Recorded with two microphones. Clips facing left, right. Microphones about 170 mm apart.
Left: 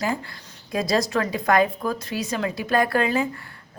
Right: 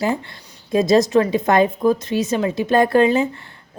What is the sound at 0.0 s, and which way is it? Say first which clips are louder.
A woman's voice: right 5 dB; 25° right (ahead or behind).